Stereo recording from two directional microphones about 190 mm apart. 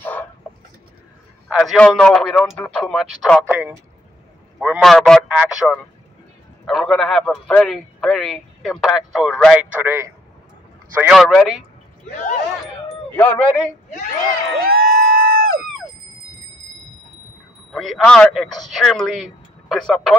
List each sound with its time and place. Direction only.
0.0 s chicken: 10° left (ahead or behind)
1.5 s a man's voice: centre (ahead or behind)
3.4 s a man's voice: 10° right (ahead or behind)
4.6 s a man's voice: centre (ahead or behind)
5.3 s a man's voice: 5° right (ahead or behind)
11.0 s a man's voice: centre (ahead or behind)
12.1 s speech: 40° left (ahead or behind)
13.1 s speech: 10° left (ahead or behind)
14.6 s a sound: 50° right (ahead or behind)
17.7 s a man's voice: centre (ahead or behind)